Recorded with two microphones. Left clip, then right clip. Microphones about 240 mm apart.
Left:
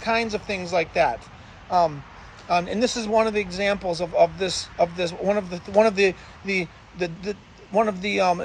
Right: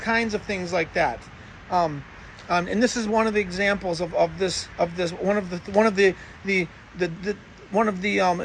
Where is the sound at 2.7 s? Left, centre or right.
Centre.